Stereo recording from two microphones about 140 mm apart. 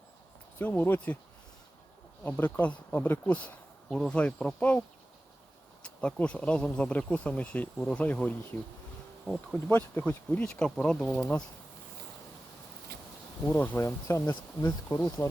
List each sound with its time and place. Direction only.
0.6 s speech: 15° left (ahead or behind)
2.2 s speech: 10° left (ahead or behind)
5.8 s speech: 5° left (ahead or behind)
9.2 s bee: centre (ahead or behind)
9.6 s speech: 10° left (ahead or behind)
13.4 s speech: 15° left (ahead or behind)